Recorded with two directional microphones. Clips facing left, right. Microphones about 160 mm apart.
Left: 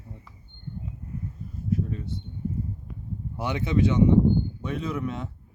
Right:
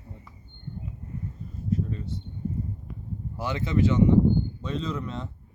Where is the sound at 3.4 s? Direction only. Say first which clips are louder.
Left 1 dB; 15° left (ahead or behind).